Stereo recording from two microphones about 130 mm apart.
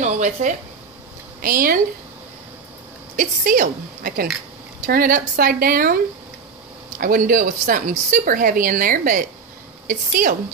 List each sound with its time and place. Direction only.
0.0 s speech: 70° right (ahead or behind)
1.4 s a woman's voice: 90° right
3.2 s a woman's voice: 90° right
7.0 s a woman's voice: 90° right